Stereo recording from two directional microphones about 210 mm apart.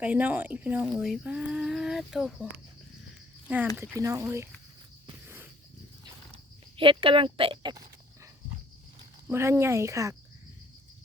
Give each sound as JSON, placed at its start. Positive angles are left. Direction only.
{"t": 0.0, "sound": "speech", "side_deg": -5}
{"t": 3.8, "sound": "speech", "side_deg": -10}
{"t": 5.2, "sound": "a sound", "side_deg": -10}
{"t": 6.7, "sound": "speech", "side_deg": -25}
{"t": 9.3, "sound": "speech", "side_deg": -10}